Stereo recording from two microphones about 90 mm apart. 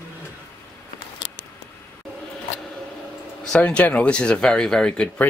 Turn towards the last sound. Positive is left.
turn(degrees=10)  # may be behind; listen again after turning